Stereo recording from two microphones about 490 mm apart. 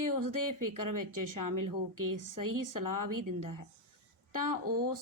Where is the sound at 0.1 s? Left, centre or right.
Right.